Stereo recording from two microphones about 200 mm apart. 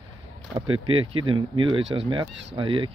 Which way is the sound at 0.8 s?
25° right (ahead or behind).